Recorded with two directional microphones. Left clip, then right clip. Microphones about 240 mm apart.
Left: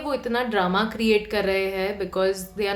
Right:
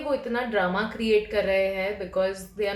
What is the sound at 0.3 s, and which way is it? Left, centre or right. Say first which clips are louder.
Speech: left 5 dB; left.